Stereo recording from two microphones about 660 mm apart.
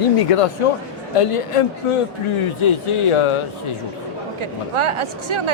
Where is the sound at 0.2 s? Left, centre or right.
Left.